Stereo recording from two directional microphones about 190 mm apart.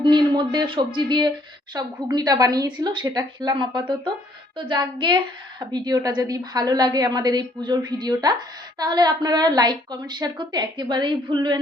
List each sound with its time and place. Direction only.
0.0 s a woman's voice: 25° right (ahead or behind)